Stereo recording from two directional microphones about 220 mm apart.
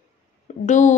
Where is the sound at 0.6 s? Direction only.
35° left (ahead or behind).